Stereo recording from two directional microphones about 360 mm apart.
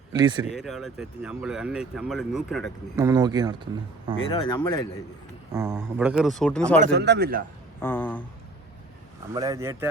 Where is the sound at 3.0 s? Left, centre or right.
Centre.